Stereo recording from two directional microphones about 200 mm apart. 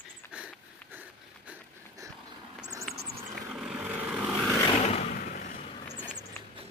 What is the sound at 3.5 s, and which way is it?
Vehicle, 5° right (ahead or behind).